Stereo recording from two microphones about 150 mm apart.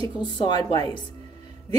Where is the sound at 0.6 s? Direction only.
40° right (ahead or behind).